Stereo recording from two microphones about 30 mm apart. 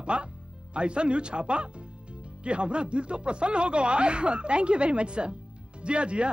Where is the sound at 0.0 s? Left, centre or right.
Right.